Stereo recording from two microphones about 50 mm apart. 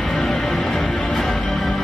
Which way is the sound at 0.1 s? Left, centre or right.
Centre.